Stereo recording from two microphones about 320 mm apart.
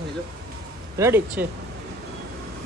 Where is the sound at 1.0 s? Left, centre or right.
Centre.